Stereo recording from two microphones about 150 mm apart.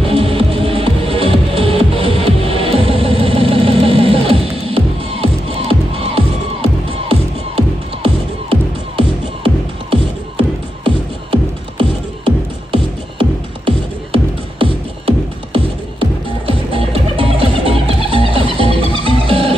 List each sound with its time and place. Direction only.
0.1 s music: 40° right (ahead or behind)
12.7 s music: 35° right (ahead or behind)